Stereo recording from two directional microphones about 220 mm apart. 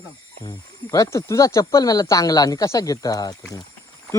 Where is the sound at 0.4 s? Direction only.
15° left (ahead or behind).